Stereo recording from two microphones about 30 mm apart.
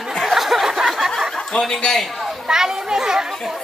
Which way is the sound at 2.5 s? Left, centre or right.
Centre.